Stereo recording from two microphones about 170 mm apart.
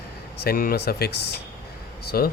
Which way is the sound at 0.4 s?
60° left (ahead or behind).